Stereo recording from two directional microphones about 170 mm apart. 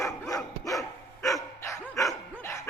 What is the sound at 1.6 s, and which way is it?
Dog, 15° left (ahead or behind).